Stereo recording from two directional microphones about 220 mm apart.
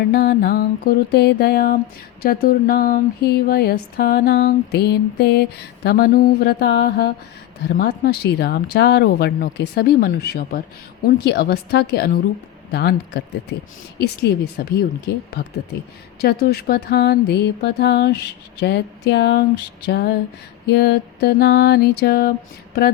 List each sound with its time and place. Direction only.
0.0 s speech: 45° left (ahead or behind)
2.2 s a sound: 40° left (ahead or behind)
3.4 s speech: 45° left (ahead or behind)